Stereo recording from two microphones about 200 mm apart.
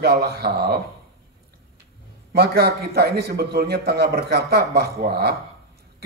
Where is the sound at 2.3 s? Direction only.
50° right (ahead or behind).